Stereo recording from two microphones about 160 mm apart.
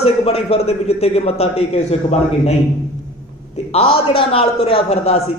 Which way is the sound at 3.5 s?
40° left (ahead or behind).